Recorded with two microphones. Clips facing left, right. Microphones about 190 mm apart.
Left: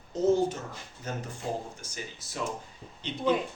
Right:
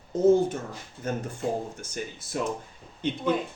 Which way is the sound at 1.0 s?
55° right (ahead or behind).